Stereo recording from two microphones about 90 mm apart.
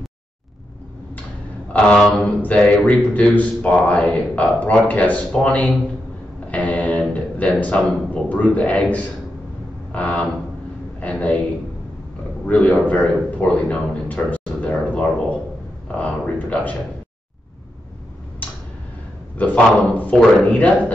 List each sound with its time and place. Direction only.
2.0 s speech: centre (ahead or behind)
2.2 s speech: 15° left (ahead or behind)
12.4 s a man's voice: 15° left (ahead or behind)
19.3 s speech: 15° left (ahead or behind)